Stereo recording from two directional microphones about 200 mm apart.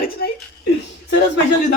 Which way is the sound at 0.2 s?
50° left (ahead or behind).